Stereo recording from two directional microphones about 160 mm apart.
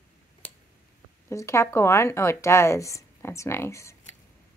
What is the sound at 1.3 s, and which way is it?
A woman's voice, 20° left (ahead or behind).